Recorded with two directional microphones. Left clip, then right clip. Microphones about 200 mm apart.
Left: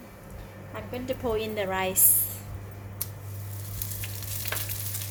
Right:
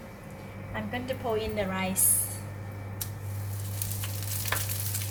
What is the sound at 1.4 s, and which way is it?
Speech, 45° left (ahead or behind).